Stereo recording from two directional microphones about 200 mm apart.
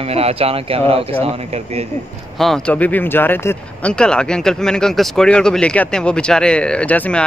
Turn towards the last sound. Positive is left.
turn(degrees=5)  # may be behind; listen again after turning